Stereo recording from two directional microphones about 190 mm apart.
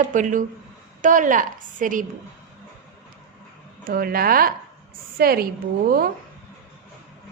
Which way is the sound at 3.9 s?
50° right (ahead or behind).